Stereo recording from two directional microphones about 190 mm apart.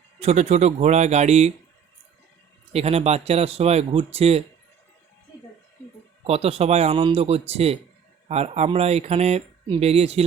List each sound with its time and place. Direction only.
0.2 s speech: 35° right (ahead or behind)
2.7 s speech: 35° right (ahead or behind)
6.2 s speech: 35° right (ahead or behind)